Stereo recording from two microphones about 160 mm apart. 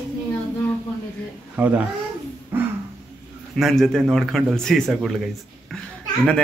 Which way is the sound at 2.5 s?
10° right (ahead or behind).